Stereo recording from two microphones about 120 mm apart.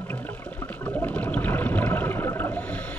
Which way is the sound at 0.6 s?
15° left (ahead or behind).